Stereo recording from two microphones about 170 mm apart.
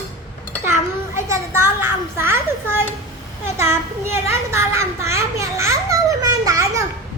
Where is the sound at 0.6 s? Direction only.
15° right (ahead or behind).